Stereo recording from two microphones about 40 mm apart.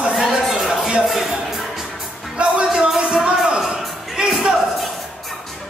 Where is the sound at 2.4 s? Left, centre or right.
Right.